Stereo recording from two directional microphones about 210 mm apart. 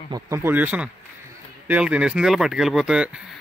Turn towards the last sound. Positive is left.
turn(degrees=-5)  # may be behind; listen again after turning